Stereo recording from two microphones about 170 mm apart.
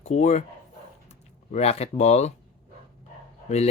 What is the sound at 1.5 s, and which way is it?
Speech, 40° left (ahead or behind).